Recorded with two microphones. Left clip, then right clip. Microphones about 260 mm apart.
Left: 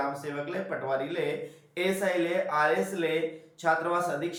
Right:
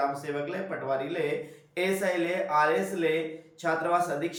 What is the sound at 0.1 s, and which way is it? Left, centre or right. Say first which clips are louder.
Speech: right 2 dB; centre.